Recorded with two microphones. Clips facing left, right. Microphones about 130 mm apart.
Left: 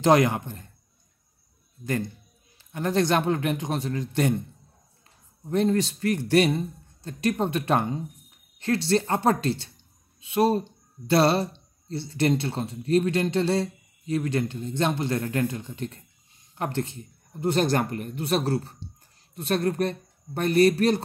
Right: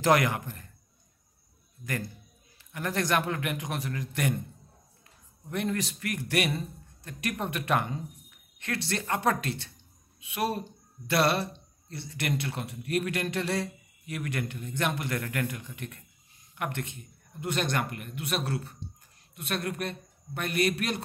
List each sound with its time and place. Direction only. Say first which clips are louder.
0.0 s speech: left 5 dB; 25° left (ahead or behind)
2.7 s speech: left 5 dB; 25° left (ahead or behind)
5.5 s speech: left 8 dB; 30° left (ahead or behind)